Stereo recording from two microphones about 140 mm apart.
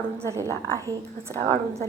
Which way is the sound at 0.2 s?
20° right (ahead or behind).